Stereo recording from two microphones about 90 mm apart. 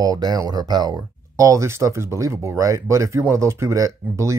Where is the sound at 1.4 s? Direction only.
35° right (ahead or behind).